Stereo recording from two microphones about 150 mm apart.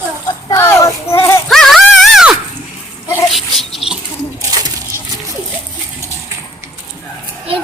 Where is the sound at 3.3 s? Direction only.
Centre (ahead or behind).